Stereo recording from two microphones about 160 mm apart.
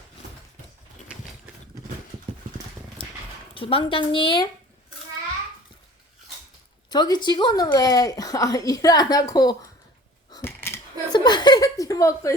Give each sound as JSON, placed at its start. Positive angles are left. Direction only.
{"t": 3.5, "sound": "a woman's voice", "side_deg": 35}
{"t": 6.9, "sound": "a woman's voice", "side_deg": 25}
{"t": 10.3, "sound": "a sound", "side_deg": 15}
{"t": 11.1, "sound": "chuckle", "side_deg": 25}